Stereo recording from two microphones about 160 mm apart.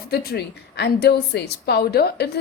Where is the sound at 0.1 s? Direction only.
80° left.